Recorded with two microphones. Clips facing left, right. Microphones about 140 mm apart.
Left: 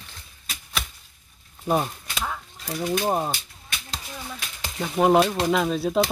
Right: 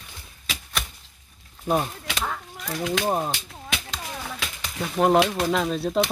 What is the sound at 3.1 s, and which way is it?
Speech, centre (ahead or behind).